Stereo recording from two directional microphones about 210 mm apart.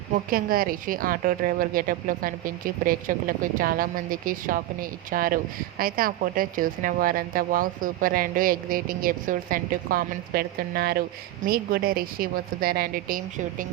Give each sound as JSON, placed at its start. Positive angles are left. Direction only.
{"t": 0.1, "sound": "a woman's voice", "side_deg": -45}